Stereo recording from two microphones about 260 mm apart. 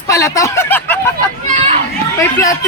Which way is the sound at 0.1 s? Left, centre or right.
Centre.